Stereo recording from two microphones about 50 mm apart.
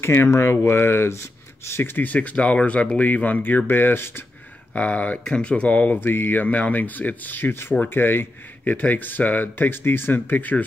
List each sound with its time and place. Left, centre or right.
0.0 s speech: left
2.0 s speech: left
4.7 s speech: left
5.2 s speech: left
5.9 s speech: left